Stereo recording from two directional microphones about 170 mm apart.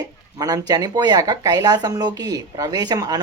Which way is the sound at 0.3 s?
20° right (ahead or behind).